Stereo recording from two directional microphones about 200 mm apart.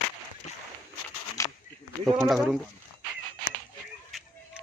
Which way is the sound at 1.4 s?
15° left (ahead or behind).